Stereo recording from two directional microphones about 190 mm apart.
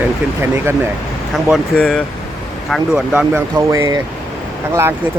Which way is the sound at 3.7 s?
15° right (ahead or behind).